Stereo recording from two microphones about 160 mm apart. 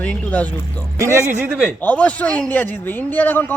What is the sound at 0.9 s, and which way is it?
Speech, 15° right (ahead or behind).